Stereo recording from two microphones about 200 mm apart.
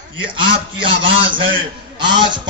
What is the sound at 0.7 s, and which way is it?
Speech, 25° right (ahead or behind).